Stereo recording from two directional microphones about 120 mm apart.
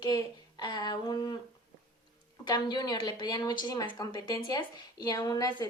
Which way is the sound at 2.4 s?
35° left (ahead or behind).